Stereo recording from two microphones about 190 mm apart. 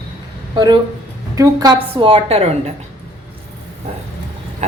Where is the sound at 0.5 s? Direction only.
25° right (ahead or behind).